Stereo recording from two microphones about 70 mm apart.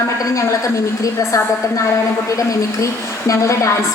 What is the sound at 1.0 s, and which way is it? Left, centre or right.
A woman's voice, left.